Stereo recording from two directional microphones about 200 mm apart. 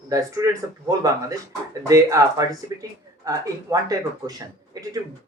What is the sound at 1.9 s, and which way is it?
Speech, 15° right (ahead or behind).